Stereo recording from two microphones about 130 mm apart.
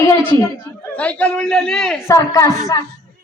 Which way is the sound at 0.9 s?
10° left (ahead or behind).